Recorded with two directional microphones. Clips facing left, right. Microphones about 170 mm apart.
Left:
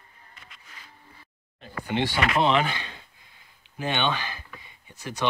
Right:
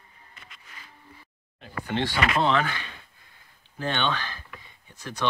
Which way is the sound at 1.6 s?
5° left (ahead or behind).